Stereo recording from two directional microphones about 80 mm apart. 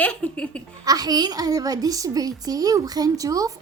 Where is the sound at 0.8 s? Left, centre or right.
Right.